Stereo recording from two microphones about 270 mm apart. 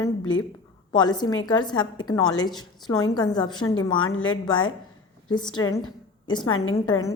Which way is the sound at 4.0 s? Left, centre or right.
Left.